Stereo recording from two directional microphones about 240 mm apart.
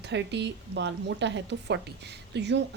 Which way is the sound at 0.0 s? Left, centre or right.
Right.